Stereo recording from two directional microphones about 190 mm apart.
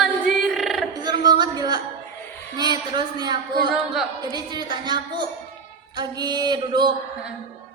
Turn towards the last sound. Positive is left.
turn(degrees=-25)  # may be behind; listen again after turning